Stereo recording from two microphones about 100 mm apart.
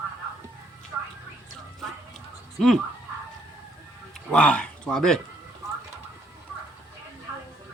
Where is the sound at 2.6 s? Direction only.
5° left (ahead or behind).